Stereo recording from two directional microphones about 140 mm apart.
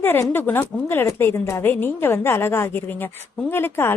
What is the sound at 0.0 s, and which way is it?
A woman's voice, 15° left (ahead or behind).